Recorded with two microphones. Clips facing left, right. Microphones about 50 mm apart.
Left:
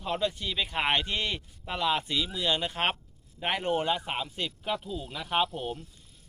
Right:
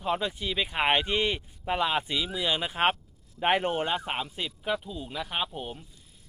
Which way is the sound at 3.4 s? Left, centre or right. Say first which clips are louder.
Right 3 dB; right.